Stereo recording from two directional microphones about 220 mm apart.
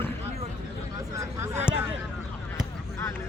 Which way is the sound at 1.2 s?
10° right (ahead or behind).